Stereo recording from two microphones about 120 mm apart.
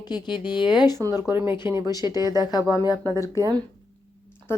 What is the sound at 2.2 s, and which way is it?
A woman's voice, 30° right (ahead or behind).